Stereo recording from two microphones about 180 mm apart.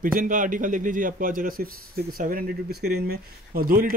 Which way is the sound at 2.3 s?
60° right (ahead or behind).